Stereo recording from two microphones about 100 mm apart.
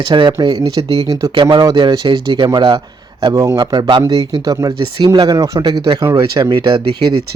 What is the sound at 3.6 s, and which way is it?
Speech, 50° right (ahead or behind).